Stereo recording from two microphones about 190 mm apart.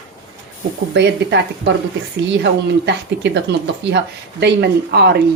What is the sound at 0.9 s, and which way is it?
Speech, 65° right (ahead or behind).